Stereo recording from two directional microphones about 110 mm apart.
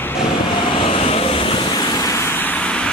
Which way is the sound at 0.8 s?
60° left (ahead or behind).